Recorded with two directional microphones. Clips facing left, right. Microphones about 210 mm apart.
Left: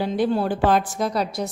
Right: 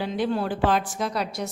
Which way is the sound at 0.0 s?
40° left (ahead or behind).